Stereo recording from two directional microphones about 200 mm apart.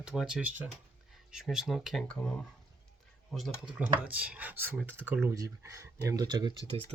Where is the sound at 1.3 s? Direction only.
5° right (ahead or behind).